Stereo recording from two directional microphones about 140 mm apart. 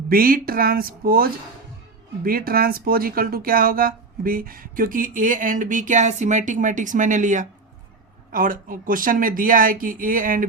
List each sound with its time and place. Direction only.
0.1 s speech: 90° right; by 7.4 s 65° right (ahead or behind)
8.3 s speech: 75° right (ahead or behind)